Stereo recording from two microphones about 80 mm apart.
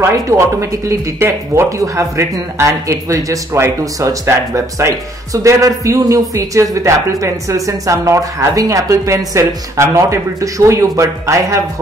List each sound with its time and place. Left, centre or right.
0.0 s speech: right